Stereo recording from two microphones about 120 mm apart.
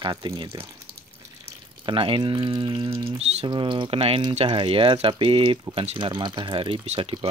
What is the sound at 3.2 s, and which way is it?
Speech, 65° right (ahead or behind).